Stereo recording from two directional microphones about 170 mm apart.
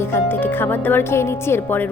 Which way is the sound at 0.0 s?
15° left (ahead or behind).